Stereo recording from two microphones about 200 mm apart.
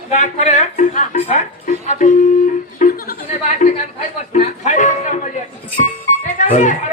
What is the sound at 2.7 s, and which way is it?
Chuckle, 40° left (ahead or behind).